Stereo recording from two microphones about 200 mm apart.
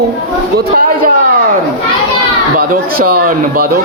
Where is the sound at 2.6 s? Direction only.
45° right (ahead or behind).